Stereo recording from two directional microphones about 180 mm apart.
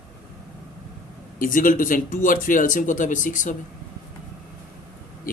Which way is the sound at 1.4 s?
50° left (ahead or behind).